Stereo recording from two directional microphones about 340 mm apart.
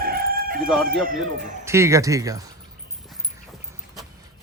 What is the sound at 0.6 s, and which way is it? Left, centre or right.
Speech, centre.